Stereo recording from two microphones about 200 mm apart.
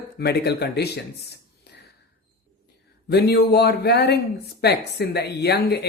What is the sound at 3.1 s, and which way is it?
Speech, 55° left (ahead or behind).